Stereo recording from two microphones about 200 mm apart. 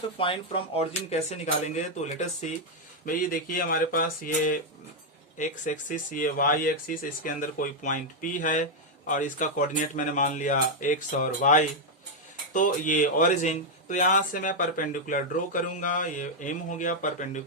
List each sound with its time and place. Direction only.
0.2 s a man's voice: 25° left (ahead or behind)